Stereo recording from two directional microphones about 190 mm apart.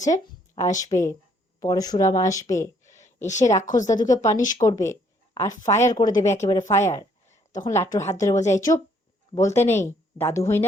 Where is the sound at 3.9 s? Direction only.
20° left (ahead or behind).